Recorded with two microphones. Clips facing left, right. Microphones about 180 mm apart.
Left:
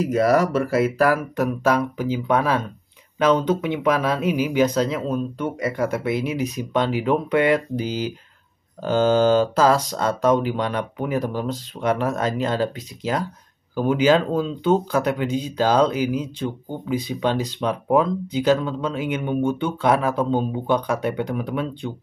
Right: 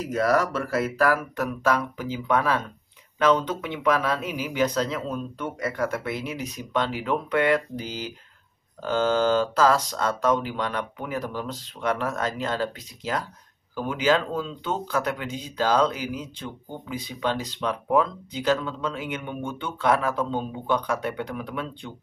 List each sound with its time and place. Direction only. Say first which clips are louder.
0.0 s speech: left 5 dB; 10° left (ahead or behind)